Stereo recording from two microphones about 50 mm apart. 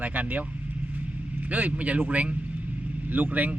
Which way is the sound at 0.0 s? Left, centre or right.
Right.